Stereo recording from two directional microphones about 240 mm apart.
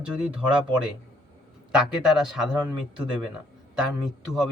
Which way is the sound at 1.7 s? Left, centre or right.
Centre.